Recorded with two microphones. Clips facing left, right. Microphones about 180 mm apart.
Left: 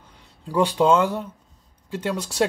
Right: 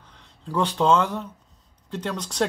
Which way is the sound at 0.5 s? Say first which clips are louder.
Left 2 dB; 10° left (ahead or behind).